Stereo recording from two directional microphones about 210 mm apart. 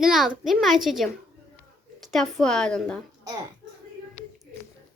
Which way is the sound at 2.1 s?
Centre (ahead or behind).